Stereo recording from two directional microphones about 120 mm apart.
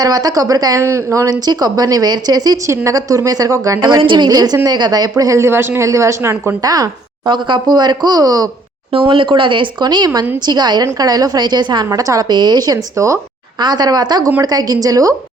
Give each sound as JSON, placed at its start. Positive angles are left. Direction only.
{"t": 0.0, "sound": "speech", "side_deg": -30}
{"t": 3.8, "sound": "speech", "side_deg": -40}
{"t": 8.9, "sound": "speech", "side_deg": -50}